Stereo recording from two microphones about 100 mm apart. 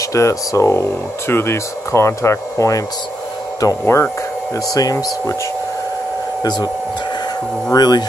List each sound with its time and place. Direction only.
0.1 s speech: 30° left (ahead or behind)
3.8 s speech: 25° left (ahead or behind)
4.7 s speech: 35° left (ahead or behind)
6.4 s speech: 45° left (ahead or behind)
7.7 s speech: 45° left (ahead or behind)